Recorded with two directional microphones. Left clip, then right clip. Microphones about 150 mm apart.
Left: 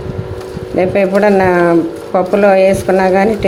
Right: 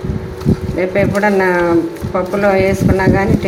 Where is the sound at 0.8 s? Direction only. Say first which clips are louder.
Left 4 dB; 40° left (ahead or behind).